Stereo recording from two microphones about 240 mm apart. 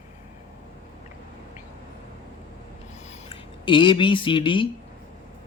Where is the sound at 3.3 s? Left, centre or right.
Left.